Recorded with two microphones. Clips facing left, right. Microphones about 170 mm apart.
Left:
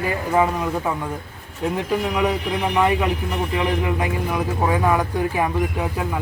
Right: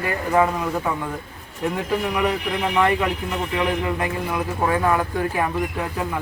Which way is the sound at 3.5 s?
15° left (ahead or behind).